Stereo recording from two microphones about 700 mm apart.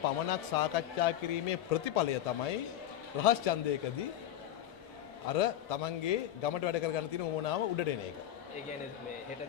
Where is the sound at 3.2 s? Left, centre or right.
Left.